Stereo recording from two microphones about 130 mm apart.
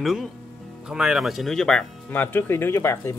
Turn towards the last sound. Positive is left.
turn(degrees=20)  # may be behind; listen again after turning